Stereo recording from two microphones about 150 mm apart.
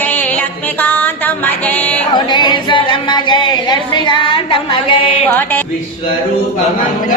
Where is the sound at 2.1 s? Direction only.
30° left (ahead or behind).